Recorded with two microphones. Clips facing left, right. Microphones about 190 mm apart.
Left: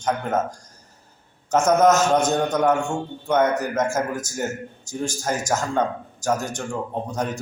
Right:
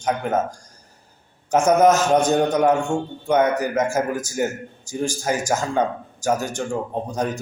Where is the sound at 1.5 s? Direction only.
10° right (ahead or behind).